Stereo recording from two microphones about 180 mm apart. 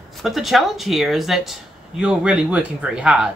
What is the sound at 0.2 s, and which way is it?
Speech, centre (ahead or behind).